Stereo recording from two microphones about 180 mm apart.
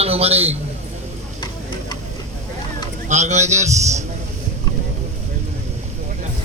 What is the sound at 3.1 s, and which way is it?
Speech, 40° right (ahead or behind).